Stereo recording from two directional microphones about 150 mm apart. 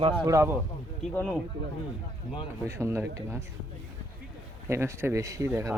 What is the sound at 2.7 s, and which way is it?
Speech, 20° right (ahead or behind).